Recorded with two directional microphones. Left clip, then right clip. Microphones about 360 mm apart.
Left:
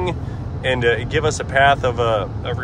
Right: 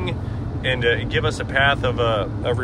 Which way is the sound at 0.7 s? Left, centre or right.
Centre.